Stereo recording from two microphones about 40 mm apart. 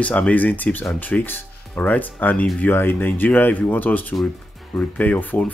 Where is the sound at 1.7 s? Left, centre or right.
Left.